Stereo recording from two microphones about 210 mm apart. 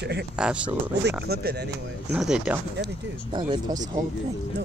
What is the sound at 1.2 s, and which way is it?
Speech, 50° right (ahead or behind).